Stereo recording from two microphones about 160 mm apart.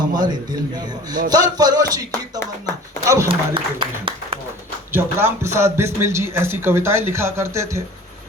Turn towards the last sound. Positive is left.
turn(degrees=-15)  # may be behind; listen again after turning